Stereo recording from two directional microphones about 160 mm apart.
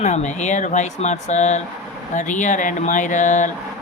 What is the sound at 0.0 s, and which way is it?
Speech, 45° left (ahead or behind).